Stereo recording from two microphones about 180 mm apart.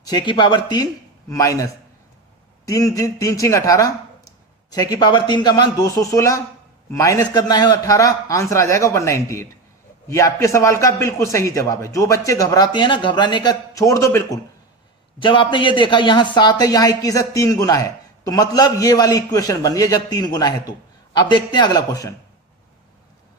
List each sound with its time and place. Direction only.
0.0 s a man's voice: 20° left (ahead or behind)
15.2 s a man's voice: 25° left (ahead or behind)